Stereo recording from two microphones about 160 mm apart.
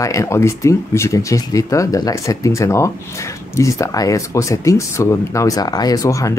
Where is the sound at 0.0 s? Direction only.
20° left (ahead or behind).